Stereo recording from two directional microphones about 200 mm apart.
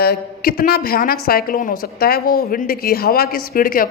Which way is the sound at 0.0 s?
50° left (ahead or behind).